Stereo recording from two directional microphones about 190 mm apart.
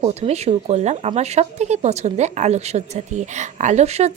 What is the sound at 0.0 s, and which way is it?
Speech, 35° right (ahead or behind).